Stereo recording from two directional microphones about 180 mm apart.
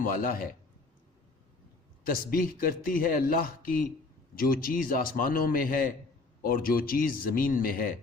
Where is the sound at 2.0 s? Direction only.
55° left (ahead or behind).